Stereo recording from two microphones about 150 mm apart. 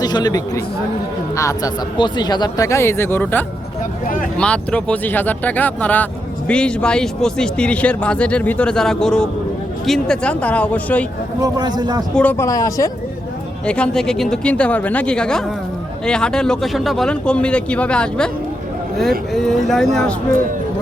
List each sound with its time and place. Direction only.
0.0 s a man's voice: 25° left (ahead or behind); by 11.0 s 10° left (ahead or behind)
11.3 s a man's voice: 25° right (ahead or behind)
12.1 s a man's voice: 10° left (ahead or behind)
12.5 s speech: 20° left (ahead or behind)
13.7 s a man's voice: 5° left (ahead or behind)
19.3 s speech: centre (ahead or behind)